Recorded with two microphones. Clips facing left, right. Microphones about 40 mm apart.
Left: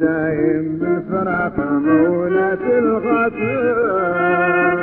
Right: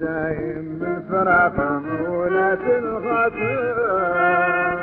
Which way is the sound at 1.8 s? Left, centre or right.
Left.